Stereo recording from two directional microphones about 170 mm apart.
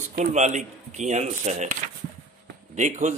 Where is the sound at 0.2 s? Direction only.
40° right (ahead or behind).